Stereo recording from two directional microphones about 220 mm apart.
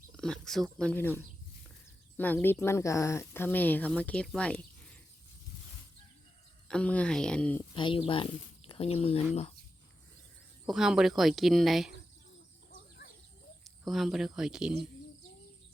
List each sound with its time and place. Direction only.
0.2 s speech: centre (ahead or behind)
6.7 s speech: 5° left (ahead or behind)
7.7 s speech: 25° left (ahead or behind)
10.7 s speech: centre (ahead or behind)
13.7 s speech: centre (ahead or behind)